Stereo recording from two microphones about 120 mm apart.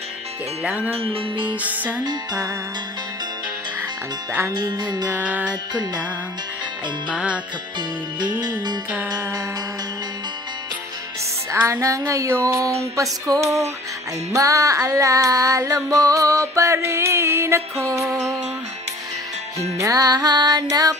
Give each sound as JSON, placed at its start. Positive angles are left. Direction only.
{"t": 0.7, "sound": "music", "side_deg": -10}
{"t": 0.9, "sound": "music", "side_deg": -50}
{"t": 1.4, "sound": "music", "side_deg": -15}
{"t": 2.0, "sound": "child singing", "side_deg": -30}
{"t": 4.6, "sound": "music", "side_deg": -35}
{"t": 5.0, "sound": "music", "side_deg": -10}
{"t": 7.1, "sound": "music", "side_deg": -10}
{"t": 8.2, "sound": "music", "side_deg": -35}
{"t": 11.5, "sound": "child singing", "side_deg": -25}
{"t": 19.8, "sound": "music", "side_deg": -30}